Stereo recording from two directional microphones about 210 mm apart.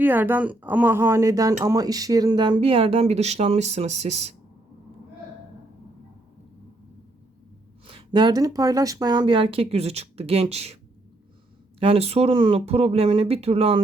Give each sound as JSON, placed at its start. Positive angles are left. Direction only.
{"t": 0.0, "sound": "speech", "side_deg": -10}
{"t": 7.9, "sound": "speech", "side_deg": -25}
{"t": 11.8, "sound": "speech", "side_deg": -30}